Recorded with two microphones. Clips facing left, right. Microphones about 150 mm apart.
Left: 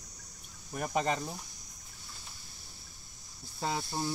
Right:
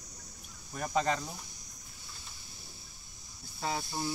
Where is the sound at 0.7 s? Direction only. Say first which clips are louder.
Even; 15° left (ahead or behind).